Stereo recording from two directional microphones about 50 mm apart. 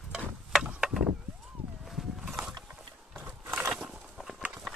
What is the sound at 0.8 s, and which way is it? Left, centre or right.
Vehicle, centre.